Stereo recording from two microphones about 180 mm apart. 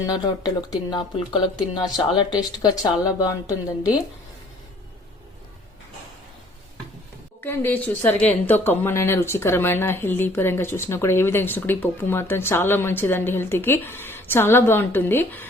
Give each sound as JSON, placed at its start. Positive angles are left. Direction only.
{"t": 0.0, "sound": "speech", "side_deg": 20}
{"t": 7.4, "sound": "speech", "side_deg": 10}